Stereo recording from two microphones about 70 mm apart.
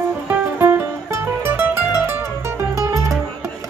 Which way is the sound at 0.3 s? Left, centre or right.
Right.